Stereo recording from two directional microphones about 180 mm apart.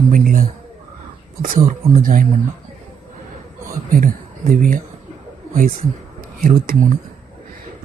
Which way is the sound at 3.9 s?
50° right (ahead or behind).